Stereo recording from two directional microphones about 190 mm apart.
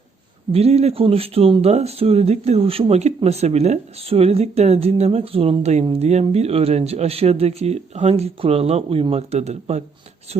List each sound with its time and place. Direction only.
0.5 s speech: 35° right (ahead or behind)